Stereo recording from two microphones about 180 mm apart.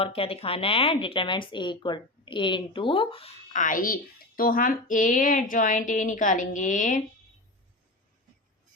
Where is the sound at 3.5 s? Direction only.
45° left (ahead or behind).